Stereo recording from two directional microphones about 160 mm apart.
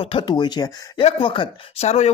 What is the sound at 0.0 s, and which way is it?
Speech, 30° left (ahead or behind).